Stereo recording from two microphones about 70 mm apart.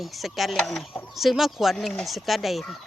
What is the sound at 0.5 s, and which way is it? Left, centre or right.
Speech, centre.